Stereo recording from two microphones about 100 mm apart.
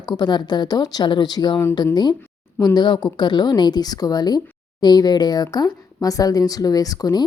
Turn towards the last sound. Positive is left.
turn(degrees=40)  # may be behind; listen again after turning